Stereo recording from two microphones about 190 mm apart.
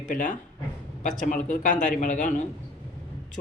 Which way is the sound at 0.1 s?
40° left (ahead or behind).